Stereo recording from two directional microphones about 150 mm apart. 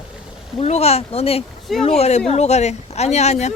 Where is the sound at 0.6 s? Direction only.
45° left (ahead or behind).